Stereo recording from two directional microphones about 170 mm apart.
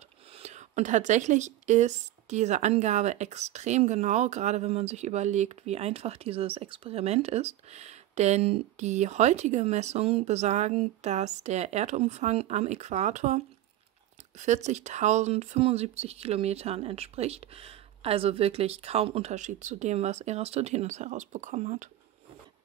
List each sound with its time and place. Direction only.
0.4 s speech: 40° right (ahead or behind)
14.4 s speech: 45° right (ahead or behind)